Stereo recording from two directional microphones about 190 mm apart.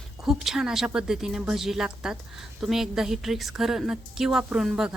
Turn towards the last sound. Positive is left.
turn(degrees=-5)  # may be behind; listen again after turning